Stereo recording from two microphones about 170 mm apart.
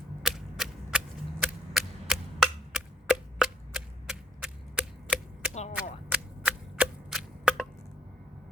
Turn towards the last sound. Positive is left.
turn(degrees=-5)  # may be behind; listen again after turning